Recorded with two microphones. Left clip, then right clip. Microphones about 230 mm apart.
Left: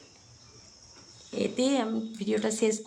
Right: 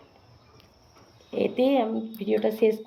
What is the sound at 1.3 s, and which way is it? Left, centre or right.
Speech, centre.